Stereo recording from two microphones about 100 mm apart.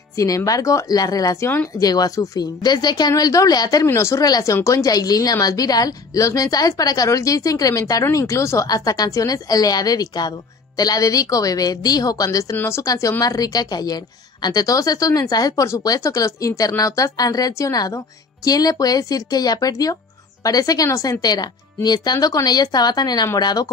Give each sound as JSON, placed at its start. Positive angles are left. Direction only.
{"t": 0.1, "sound": "a woman's voice", "side_deg": 30}